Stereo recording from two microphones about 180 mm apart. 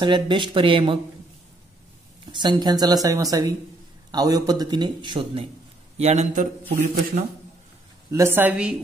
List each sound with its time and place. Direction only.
0.0 s a man's voice: 25° right (ahead or behind)
2.3 s a man's voice: 25° right (ahead or behind); by 7.2 s 45° right (ahead or behind)
8.1 s a woman's voice: 15° right (ahead or behind)